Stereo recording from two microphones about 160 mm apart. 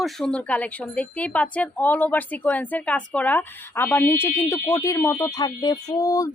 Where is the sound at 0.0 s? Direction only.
5° left (ahead or behind).